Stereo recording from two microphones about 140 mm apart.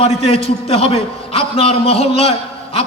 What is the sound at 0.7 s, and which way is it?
A man's voice, 45° left (ahead or behind).